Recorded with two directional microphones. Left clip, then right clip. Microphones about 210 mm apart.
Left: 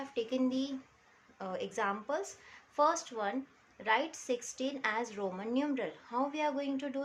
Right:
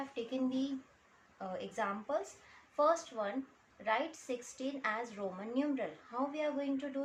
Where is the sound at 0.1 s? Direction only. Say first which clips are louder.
Left 7 dB; 45° left (ahead or behind).